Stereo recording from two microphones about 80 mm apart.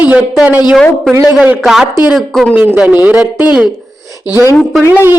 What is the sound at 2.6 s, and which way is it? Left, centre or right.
Speech, centre.